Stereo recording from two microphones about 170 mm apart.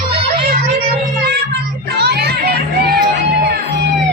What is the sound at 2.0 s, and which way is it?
Speech, 70° right (ahead or behind).